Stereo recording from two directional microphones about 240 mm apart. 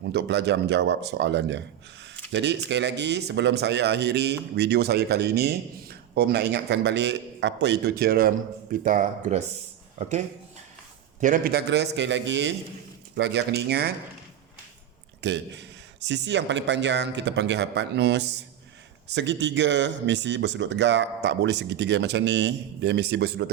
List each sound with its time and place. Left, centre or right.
0.1 s speech: right
11.2 s speech: right
15.2 s speech: right